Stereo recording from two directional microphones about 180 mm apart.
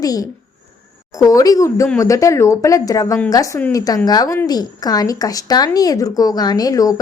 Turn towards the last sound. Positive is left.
turn(degrees=20)  # may be behind; listen again after turning